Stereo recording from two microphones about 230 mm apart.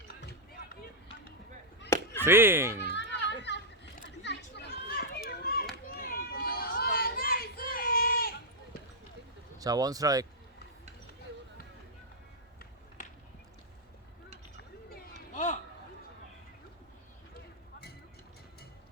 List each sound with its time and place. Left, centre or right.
0.1 s run: left
2.2 s speech: centre
2.9 s children playing: left
9.6 s speech: centre
14.8 s a sound: left